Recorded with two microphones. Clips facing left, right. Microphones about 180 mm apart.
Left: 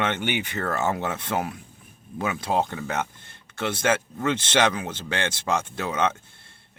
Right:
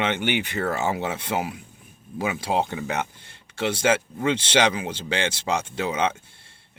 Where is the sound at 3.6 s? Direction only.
10° right (ahead or behind).